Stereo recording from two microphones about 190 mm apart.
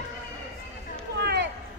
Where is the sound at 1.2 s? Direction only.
60° right (ahead or behind).